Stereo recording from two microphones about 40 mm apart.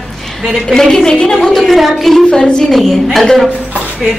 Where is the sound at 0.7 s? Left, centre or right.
Centre.